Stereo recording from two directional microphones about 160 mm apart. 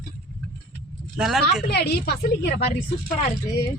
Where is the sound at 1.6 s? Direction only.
90° left.